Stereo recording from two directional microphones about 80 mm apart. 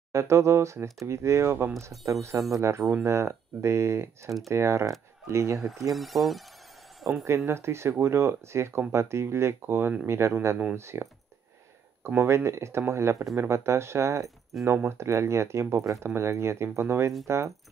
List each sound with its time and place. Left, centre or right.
0.1 s speech: right
5.9 s speech: centre
7.0 s a sound: centre
7.2 s speech: right
12.1 s speech: right
14.5 s speech: centre
14.9 s speech: right